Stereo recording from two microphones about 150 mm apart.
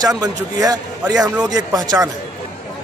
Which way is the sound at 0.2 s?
25° right (ahead or behind).